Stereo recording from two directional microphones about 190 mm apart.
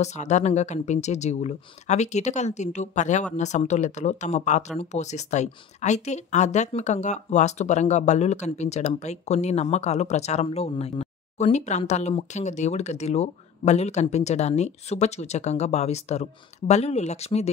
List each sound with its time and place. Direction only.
0.0 s speech: 35° left (ahead or behind)